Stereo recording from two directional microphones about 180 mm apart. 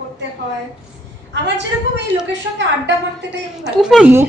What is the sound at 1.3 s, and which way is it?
Speech, 75° right (ahead or behind).